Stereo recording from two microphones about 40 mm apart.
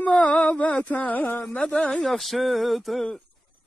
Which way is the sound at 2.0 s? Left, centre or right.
Centre.